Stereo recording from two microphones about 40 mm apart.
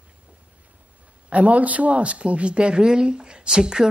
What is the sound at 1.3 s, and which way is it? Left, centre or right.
A man's voice, right.